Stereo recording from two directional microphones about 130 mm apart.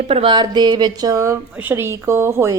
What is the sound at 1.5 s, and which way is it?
A woman's voice, 15° right (ahead or behind).